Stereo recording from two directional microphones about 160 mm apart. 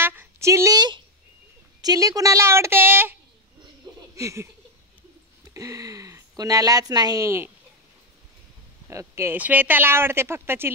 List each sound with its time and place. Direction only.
0.0 s a sound: 15° right (ahead or behind)
1.8 s speech: 25° right (ahead or behind)
8.8 s speech: 15° right (ahead or behind)